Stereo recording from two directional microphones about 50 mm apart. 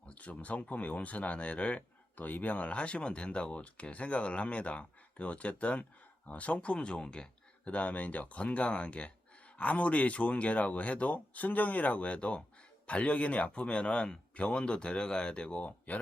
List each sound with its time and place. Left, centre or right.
0.0 s speech: left